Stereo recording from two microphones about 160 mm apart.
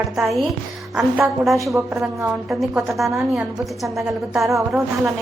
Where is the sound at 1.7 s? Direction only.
15° right (ahead or behind).